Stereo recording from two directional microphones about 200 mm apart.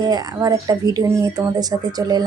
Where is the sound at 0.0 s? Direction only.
20° right (ahead or behind).